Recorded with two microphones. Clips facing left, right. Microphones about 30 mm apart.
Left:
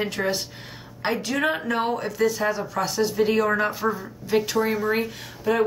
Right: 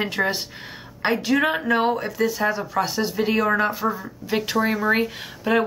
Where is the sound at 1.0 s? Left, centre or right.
Centre.